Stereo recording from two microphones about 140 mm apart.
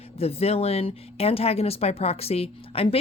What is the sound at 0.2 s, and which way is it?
Speech, 45° left (ahead or behind).